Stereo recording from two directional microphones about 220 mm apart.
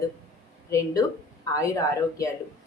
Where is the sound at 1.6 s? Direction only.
15° left (ahead or behind).